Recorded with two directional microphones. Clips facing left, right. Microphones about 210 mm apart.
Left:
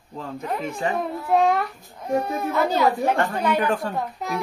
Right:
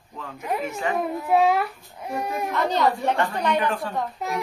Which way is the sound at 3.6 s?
45° left (ahead or behind).